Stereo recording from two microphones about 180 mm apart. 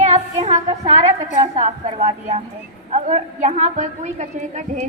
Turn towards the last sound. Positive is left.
turn(degrees=-40)  # may be behind; listen again after turning